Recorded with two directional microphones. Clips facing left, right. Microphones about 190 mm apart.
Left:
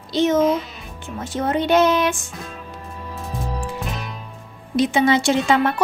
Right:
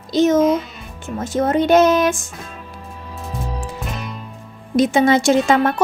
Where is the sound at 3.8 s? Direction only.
Centre (ahead or behind).